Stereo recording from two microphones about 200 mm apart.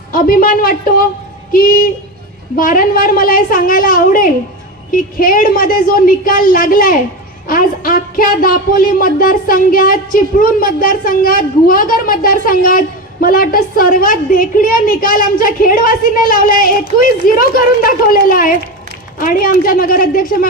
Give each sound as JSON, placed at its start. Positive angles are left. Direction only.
{"t": 0.1, "sound": "speech", "side_deg": 45}